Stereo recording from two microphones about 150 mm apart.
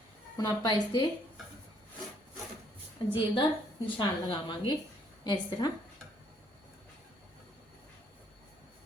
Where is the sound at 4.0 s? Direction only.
30° left (ahead or behind).